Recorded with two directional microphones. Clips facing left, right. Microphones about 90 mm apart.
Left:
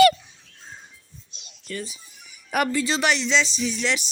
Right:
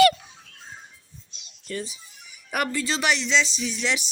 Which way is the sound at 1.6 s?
25° right (ahead or behind).